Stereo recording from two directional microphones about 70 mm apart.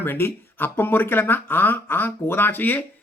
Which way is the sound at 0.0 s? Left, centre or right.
Left.